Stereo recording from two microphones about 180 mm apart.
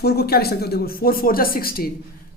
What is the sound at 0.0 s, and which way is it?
Speech, 60° left (ahead or behind).